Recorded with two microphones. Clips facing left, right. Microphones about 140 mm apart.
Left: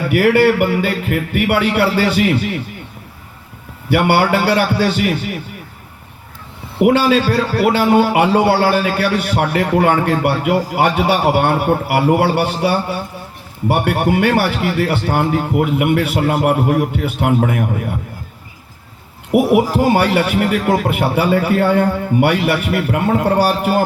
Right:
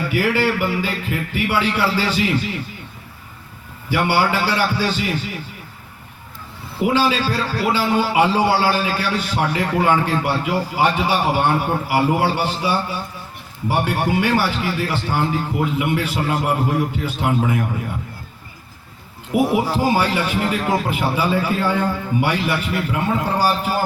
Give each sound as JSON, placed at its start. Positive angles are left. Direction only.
{"t": 0.1, "sound": "a man's voice", "side_deg": 60}
{"t": 3.8, "sound": "a man's voice", "side_deg": 60}
{"t": 6.7, "sound": "a man's voice", "side_deg": 60}
{"t": 19.3, "sound": "a man's voice", "side_deg": 65}